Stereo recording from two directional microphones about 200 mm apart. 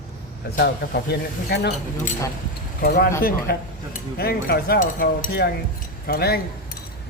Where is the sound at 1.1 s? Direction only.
55° left (ahead or behind).